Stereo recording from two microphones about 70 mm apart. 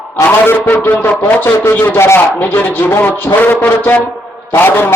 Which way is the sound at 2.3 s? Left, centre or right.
Left.